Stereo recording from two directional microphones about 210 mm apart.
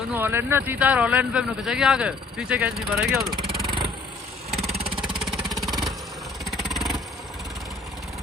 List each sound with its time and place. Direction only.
0.1 s speech: 10° right (ahead or behind)
4.5 s vehicle: 30° right (ahead or behind)
4.9 s a sound: centre (ahead or behind)
6.4 s vehicle: centre (ahead or behind)